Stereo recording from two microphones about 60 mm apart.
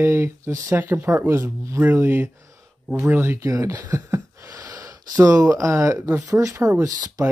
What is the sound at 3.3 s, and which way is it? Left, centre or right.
Speech, right.